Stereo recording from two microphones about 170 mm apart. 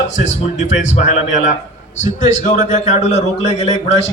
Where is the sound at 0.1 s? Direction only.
40° left (ahead or behind).